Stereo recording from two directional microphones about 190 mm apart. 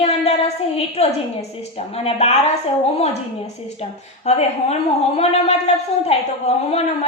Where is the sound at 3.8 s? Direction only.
35° left (ahead or behind).